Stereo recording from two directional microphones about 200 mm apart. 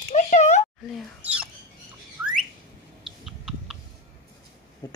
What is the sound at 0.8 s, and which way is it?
Whispering, 5° right (ahead or behind).